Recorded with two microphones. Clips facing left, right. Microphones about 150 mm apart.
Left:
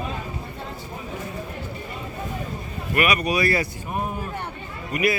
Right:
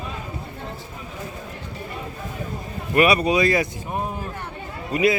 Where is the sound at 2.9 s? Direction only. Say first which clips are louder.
Right 4 dB; 30° right (ahead or behind).